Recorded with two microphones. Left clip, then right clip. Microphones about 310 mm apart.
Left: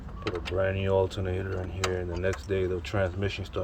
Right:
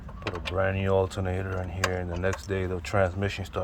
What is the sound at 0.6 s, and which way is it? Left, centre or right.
Speech, centre.